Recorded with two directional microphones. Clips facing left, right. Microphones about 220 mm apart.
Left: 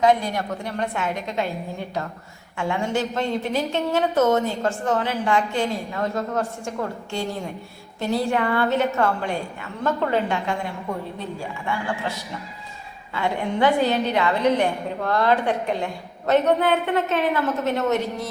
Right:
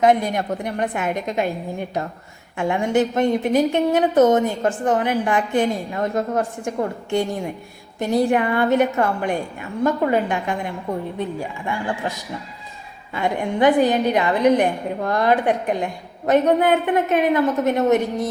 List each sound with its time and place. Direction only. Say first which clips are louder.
0.0 s a woman's voice: right 2 dB; 20° right (ahead or behind)